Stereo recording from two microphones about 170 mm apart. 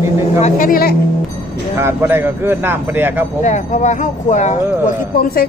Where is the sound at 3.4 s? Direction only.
45° left (ahead or behind).